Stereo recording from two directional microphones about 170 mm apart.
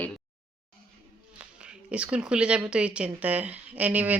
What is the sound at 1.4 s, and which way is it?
Speech, 5° right (ahead or behind).